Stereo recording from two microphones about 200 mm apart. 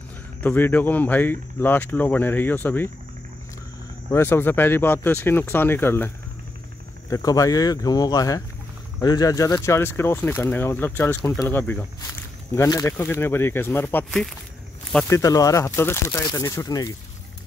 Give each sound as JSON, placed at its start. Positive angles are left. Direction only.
{"t": 0.4, "sound": "speech", "side_deg": 10}
{"t": 4.1, "sound": "speech", "side_deg": 10}
{"t": 15.0, "sound": "speech", "side_deg": 15}